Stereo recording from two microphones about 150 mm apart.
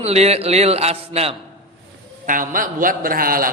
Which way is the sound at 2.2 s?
65° right (ahead or behind).